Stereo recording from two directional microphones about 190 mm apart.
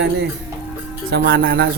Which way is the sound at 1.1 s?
55° right (ahead or behind).